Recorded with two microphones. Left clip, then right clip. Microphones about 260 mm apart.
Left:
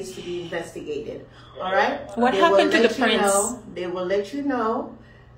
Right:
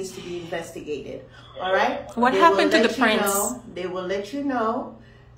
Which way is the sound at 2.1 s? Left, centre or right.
Centre.